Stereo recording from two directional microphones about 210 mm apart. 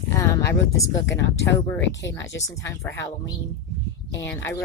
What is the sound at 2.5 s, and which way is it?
Speech, 15° left (ahead or behind).